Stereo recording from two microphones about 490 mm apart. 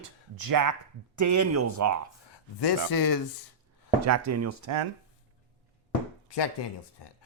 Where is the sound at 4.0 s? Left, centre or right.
Right.